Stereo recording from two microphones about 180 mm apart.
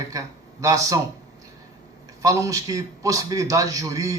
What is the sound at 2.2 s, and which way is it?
Speech, 20° right (ahead or behind).